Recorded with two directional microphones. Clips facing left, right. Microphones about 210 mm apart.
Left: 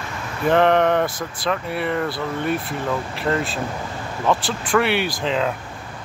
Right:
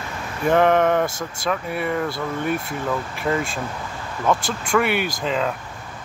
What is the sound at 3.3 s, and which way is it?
Speech, 5° right (ahead or behind).